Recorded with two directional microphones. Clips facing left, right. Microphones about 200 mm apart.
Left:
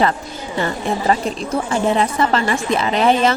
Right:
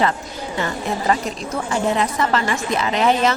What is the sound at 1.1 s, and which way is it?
A woman's voice, 30° left (ahead or behind).